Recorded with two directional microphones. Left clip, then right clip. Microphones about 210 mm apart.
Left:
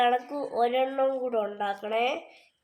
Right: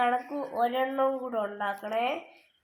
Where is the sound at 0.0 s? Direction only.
40° left (ahead or behind).